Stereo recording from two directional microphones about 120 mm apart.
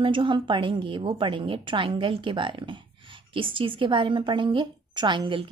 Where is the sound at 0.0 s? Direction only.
45° right (ahead or behind).